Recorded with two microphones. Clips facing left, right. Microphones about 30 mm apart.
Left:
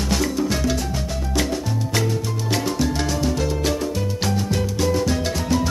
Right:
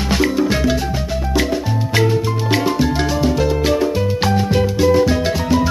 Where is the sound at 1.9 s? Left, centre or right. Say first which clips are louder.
Right 8 dB; right.